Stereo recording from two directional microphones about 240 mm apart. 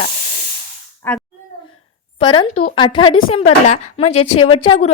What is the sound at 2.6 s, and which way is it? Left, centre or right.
A woman's voice, left.